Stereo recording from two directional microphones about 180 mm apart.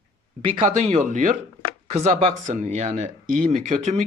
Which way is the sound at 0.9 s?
40° right (ahead or behind).